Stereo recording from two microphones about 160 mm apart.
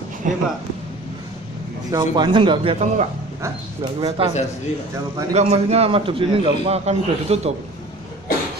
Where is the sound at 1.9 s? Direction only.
30° right (ahead or behind).